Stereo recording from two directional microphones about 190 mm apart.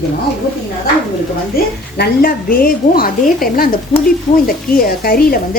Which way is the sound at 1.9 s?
55° left (ahead or behind).